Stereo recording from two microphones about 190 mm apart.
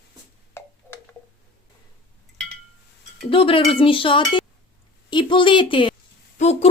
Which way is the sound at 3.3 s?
30° left (ahead or behind).